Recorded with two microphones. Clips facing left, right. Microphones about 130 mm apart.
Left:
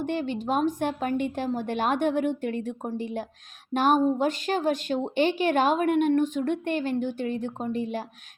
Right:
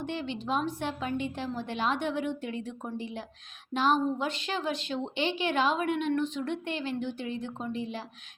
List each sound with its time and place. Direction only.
0.0 s a woman's voice: 45° left (ahead or behind)